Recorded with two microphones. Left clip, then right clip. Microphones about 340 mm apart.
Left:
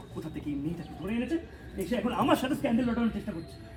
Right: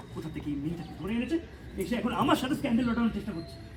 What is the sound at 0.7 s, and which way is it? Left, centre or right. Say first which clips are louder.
Speech: even; centre.